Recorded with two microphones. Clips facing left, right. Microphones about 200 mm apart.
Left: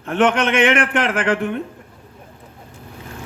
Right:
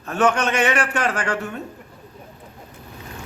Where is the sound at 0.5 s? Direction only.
55° left (ahead or behind).